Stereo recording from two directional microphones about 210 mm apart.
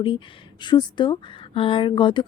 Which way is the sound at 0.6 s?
20° left (ahead or behind).